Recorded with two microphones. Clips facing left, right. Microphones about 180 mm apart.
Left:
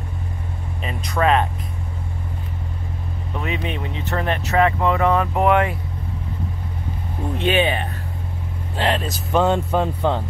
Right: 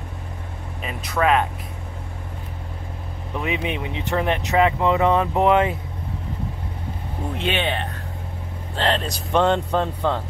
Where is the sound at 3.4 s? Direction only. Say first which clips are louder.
Right 1 dB; 15° right (ahead or behind).